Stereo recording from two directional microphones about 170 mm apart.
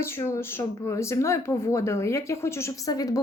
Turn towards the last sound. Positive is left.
turn(degrees=20)  # may be behind; listen again after turning